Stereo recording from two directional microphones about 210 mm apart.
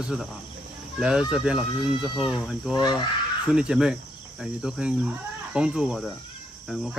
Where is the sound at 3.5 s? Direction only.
5° right (ahead or behind).